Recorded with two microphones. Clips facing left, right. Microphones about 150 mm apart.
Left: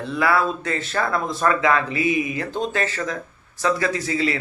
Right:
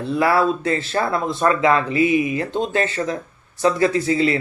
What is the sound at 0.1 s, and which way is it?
Speech, 30° right (ahead or behind).